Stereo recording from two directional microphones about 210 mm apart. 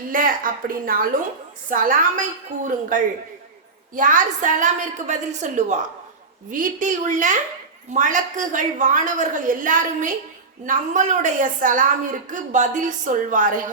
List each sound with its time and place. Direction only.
0.1 s a woman's voice: 40° right (ahead or behind)
3.9 s a woman's voice: 40° right (ahead or behind)